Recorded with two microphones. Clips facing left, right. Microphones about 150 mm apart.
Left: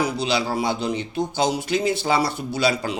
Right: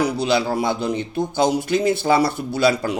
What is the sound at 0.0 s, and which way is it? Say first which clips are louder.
Speech: right 3 dB; 55° right (ahead or behind).